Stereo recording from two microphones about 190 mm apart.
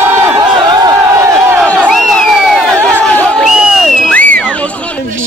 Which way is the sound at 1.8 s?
Centre (ahead or behind).